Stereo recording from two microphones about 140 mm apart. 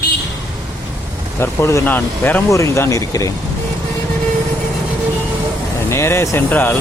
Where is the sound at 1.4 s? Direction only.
20° left (ahead or behind).